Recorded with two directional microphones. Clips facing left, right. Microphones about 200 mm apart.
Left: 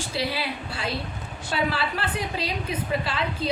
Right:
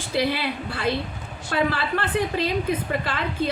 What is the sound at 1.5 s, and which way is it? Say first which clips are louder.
A woman's voice: right 3 dB; 50° right (ahead or behind).